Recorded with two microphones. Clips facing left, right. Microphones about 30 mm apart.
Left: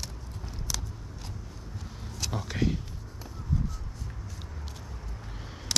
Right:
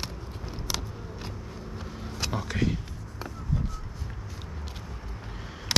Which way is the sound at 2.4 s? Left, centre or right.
Centre.